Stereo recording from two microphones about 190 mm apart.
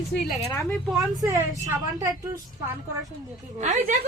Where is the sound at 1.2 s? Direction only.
15° right (ahead or behind).